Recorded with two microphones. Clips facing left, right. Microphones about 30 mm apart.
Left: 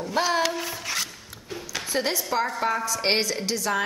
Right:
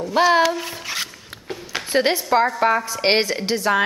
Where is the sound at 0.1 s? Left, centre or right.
Right.